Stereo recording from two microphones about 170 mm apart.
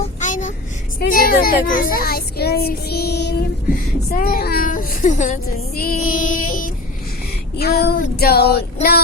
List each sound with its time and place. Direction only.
0.0 s vehicle: 45° left (ahead or behind)
0.9 s a child's voice: 60° left (ahead or behind); by 3.3 s 75° left (ahead or behind)
4.1 s speech: 60° left (ahead or behind)
5.7 s a child's voice: 60° left (ahead or behind)
7.6 s child singing: 70° left (ahead or behind)